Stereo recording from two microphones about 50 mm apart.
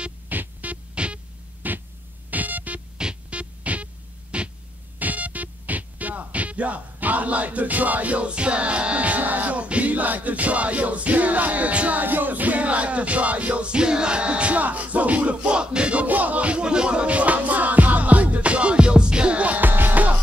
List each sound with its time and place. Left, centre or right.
0.3 s music: right
0.9 s music: right
1.6 s a sound: right
2.3 s music: right
3.0 s music: right
4.9 s speech: right
19.6 s music: right